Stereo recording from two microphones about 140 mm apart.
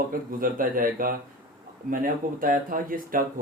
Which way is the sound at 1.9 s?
80° right.